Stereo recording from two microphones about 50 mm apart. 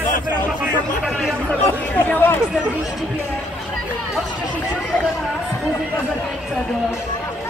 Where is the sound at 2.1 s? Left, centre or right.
Left.